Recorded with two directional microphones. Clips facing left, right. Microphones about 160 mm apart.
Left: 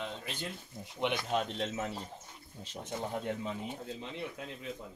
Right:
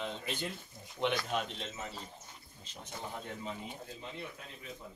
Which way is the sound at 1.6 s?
70° left (ahead or behind).